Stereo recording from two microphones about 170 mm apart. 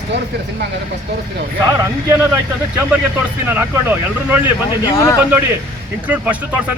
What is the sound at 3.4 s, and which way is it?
Speech, 10° right (ahead or behind).